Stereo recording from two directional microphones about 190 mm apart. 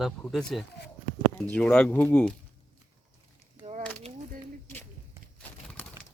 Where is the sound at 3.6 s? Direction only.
35° right (ahead or behind).